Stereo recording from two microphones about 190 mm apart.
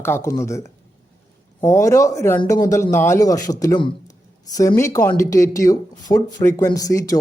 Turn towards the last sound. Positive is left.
turn(degrees=15)  # may be behind; listen again after turning